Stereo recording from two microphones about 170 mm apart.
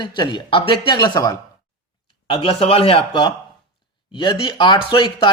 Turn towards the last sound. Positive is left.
turn(degrees=30)  # may be behind; listen again after turning